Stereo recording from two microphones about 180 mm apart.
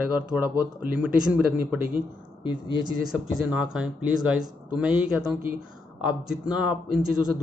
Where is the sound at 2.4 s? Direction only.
25° left (ahead or behind).